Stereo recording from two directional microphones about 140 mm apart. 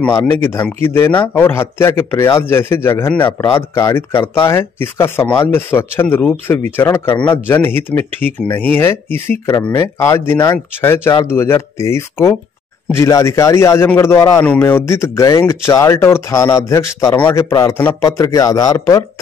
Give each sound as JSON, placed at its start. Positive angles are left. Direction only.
{"t": 0.3, "sound": "a man's voice", "side_deg": 15}